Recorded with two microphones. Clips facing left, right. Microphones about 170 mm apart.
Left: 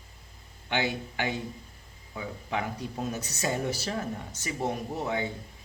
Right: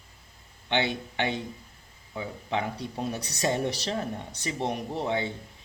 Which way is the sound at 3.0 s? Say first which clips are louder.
Right 2 dB; 35° right (ahead or behind).